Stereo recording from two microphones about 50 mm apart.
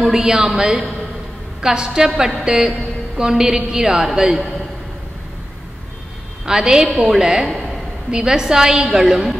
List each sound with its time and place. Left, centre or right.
0.0 s a woman's voice: centre
6.4 s a woman's voice: centre